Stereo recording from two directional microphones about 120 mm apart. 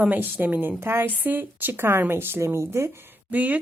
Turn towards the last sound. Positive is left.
turn(degrees=-15)  # may be behind; listen again after turning